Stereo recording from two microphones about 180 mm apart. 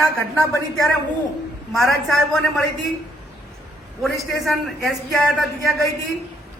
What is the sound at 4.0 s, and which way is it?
Speech, centre (ahead or behind).